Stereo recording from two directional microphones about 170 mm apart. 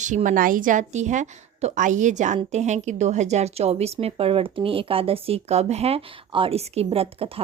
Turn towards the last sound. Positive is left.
turn(degrees=-35)  # may be behind; listen again after turning